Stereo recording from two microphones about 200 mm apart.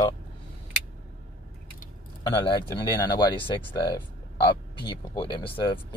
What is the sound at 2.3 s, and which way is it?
Speech, 25° left (ahead or behind).